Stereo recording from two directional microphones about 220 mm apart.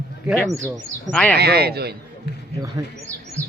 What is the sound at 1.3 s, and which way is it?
Speech, 45° right (ahead or behind).